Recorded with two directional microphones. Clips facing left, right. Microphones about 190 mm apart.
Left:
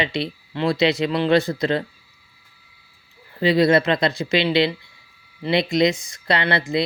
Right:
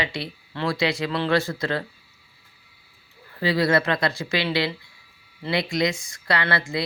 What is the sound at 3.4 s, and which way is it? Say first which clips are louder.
Speech: left 5 dB; 20° left (ahead or behind).